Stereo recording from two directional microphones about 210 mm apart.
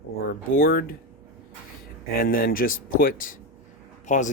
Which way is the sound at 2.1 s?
45° left (ahead or behind).